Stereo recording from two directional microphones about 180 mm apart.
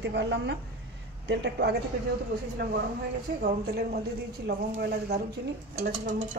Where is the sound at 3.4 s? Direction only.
60° right (ahead or behind).